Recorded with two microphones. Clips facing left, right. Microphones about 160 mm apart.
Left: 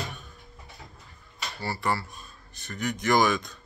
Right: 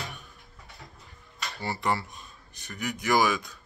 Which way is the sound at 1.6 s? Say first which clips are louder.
Even; 20° right (ahead or behind).